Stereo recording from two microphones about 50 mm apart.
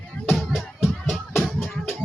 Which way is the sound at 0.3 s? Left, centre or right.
Centre.